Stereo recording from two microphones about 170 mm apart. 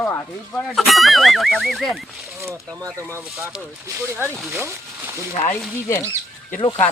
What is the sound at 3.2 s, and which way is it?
Speech, 5° right (ahead or behind).